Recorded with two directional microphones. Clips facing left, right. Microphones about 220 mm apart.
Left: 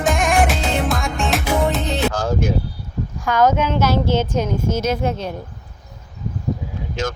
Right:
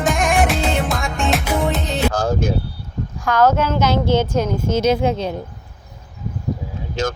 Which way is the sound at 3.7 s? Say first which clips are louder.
Right 1 dB; 15° right (ahead or behind).